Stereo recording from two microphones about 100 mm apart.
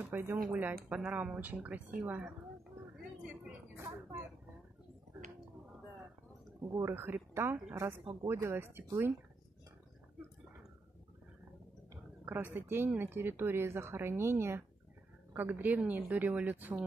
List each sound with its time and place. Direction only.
0.0 s speech: 25° right (ahead or behind)
3.7 s a sound: 25° right (ahead or behind)
6.7 s speech: 25° right (ahead or behind)
12.3 s speech: 20° right (ahead or behind)